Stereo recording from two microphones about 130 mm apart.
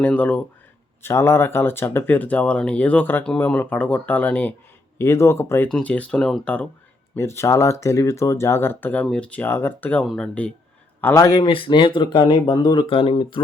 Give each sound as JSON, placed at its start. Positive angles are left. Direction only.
{"t": 0.0, "sound": "speech", "side_deg": 15}
{"t": 5.6, "sound": "speech", "side_deg": 5}
{"t": 11.0, "sound": "speech", "side_deg": 25}